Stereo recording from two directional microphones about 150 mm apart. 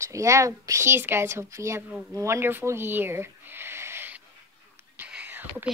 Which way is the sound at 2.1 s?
15° right (ahead or behind).